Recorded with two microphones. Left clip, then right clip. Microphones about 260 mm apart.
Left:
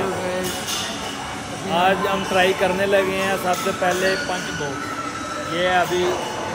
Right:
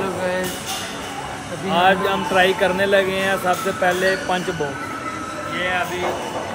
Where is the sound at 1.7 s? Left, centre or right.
Centre.